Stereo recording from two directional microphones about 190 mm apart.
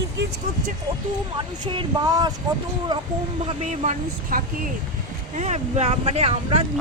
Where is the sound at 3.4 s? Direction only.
40° right (ahead or behind).